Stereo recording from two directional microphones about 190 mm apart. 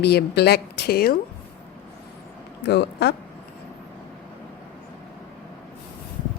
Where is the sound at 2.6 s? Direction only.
60° left (ahead or behind).